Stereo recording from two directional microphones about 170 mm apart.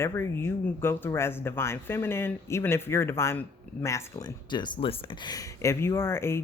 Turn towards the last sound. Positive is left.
turn(degrees=15)  # may be behind; listen again after turning